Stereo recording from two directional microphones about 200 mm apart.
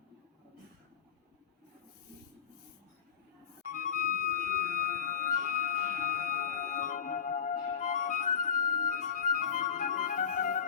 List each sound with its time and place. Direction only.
3.7 s music: 40° left (ahead or behind)